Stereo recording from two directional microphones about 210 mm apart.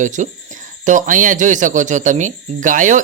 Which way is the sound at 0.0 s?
35° right (ahead or behind).